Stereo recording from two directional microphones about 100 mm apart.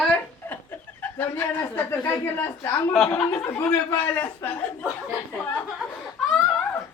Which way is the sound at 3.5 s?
25° left (ahead or behind).